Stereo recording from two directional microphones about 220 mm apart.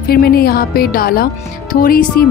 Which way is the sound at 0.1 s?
45° left (ahead or behind).